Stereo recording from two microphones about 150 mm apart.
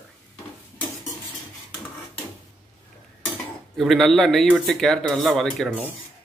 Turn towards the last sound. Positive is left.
turn(degrees=0)  # may be behind; listen again after turning